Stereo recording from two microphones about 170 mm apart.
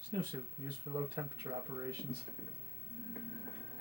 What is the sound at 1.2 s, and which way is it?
Speech, 25° right (ahead or behind).